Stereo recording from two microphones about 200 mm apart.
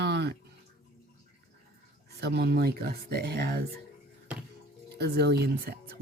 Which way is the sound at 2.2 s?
55° right (ahead or behind).